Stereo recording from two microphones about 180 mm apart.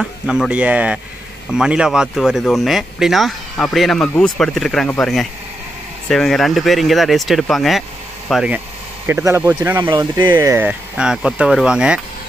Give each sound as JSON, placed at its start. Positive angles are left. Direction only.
{"t": 0.0, "sound": "speech", "side_deg": -5}
{"t": 9.0, "sound": "speech", "side_deg": -15}
{"t": 9.8, "sound": "speech", "side_deg": -25}
{"t": 10.3, "sound": "speech", "side_deg": -15}